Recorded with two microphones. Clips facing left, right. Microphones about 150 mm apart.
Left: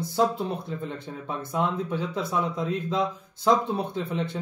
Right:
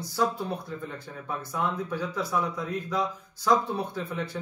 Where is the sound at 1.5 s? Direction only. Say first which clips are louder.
Left 4 dB; 20° left (ahead or behind).